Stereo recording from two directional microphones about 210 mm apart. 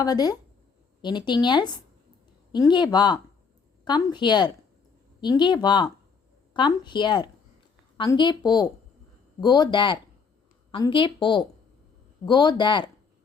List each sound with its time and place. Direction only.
0.0 s a woman's voice: 20° left (ahead or behind)